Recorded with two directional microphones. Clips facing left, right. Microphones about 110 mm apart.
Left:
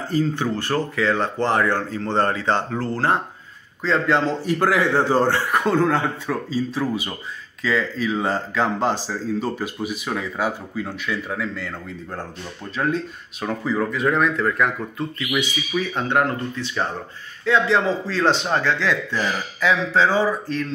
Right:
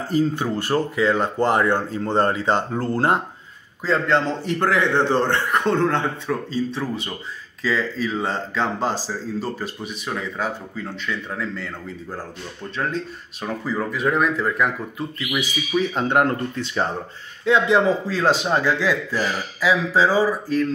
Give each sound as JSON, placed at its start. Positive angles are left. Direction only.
{"t": 0.1, "sound": "a man's voice", "side_deg": -10}
{"t": 3.8, "sound": "speech", "side_deg": 0}
{"t": 12.7, "sound": "speech", "side_deg": 0}
{"t": 15.7, "sound": "speech", "side_deg": -20}
{"t": 17.5, "sound": "a man's voice", "side_deg": -15}